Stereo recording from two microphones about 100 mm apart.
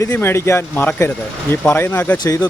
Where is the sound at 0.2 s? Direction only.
25° left (ahead or behind).